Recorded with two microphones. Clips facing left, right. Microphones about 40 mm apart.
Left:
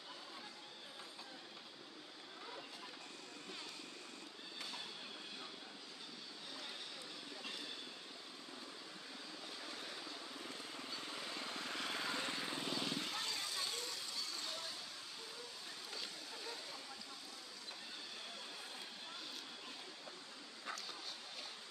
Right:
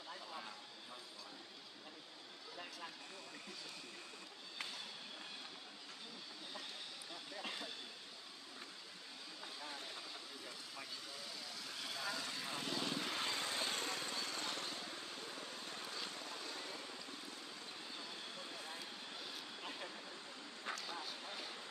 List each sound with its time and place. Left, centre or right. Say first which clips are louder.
11.1 s vehicle: left 4 dB; left
12.4 s vehicle: even; centre
13.0 s vehicle: right 2 dB; right
13.3 s vehicle: right 3 dB; right